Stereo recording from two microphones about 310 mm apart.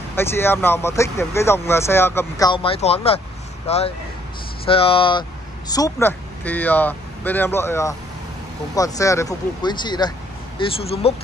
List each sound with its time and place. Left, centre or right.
0.1 s speech: centre